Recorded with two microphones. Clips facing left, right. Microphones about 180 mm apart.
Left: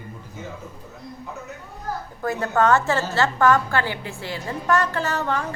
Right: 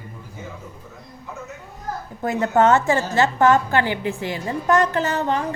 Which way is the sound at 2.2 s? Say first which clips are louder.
Right 3 dB; 20° right (ahead or behind).